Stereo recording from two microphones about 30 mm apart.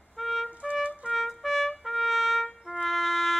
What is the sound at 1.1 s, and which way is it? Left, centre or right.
Trumpet, centre.